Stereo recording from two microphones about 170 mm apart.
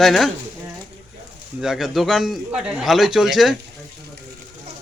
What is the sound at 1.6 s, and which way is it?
A man's voice, centre (ahead or behind).